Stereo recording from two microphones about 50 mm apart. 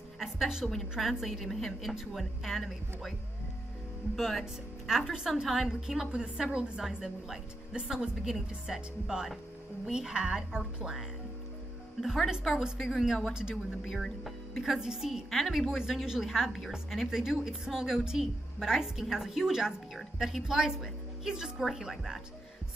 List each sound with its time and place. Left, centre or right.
0.2 s music: centre
0.9 s speech: centre
4.2 s speech: centre
5.4 s a woman's voice: centre
12.0 s speech: centre
13.3 s a woman's voice: centre
13.8 s a woman's voice: centre